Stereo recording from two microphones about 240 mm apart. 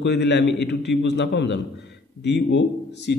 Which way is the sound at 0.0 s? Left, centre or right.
Left.